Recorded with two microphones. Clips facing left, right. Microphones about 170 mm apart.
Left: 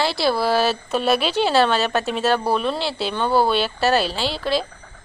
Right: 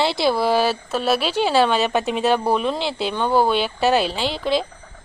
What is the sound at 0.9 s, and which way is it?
Speech, centre (ahead or behind).